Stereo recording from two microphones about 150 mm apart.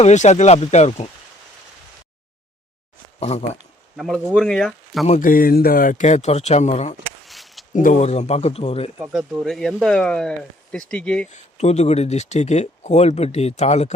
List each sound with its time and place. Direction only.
0.0 s speech: 50° left (ahead or behind)
3.2 s speech: 45° left (ahead or behind)
3.9 s speech: centre (ahead or behind)
5.0 s speech: 55° left (ahead or behind)
7.3 s a sound: centre (ahead or behind)
7.7 s speech: 60° left (ahead or behind); by 8.9 s 40° left (ahead or behind)
9.1 s speech: centre (ahead or behind)
11.3 s speech: 50° left (ahead or behind)